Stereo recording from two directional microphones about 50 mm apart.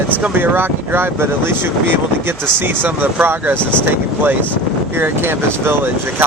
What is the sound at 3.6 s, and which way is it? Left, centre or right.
Speech, left.